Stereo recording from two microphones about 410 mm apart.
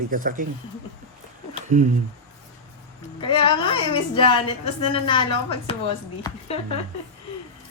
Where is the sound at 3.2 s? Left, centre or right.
Centre.